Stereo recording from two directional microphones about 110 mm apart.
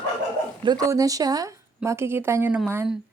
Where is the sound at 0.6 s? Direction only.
30° right (ahead or behind).